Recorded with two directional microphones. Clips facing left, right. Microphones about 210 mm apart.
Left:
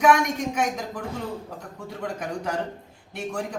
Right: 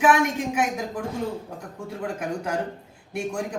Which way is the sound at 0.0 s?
5° right (ahead or behind).